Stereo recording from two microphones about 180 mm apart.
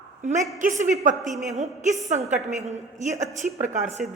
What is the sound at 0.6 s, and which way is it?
A woman's voice, 45° right (ahead or behind).